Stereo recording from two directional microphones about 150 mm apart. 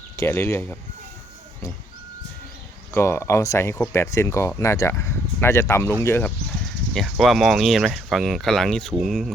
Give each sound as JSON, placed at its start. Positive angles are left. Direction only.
{"t": 0.2, "sound": "speech", "side_deg": 15}
{"t": 2.9, "sound": "speech", "side_deg": 15}
{"t": 6.9, "sound": "speech", "side_deg": 0}